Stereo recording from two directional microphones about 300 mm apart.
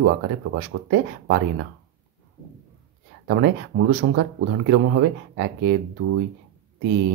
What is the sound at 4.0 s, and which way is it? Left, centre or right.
Speech, right.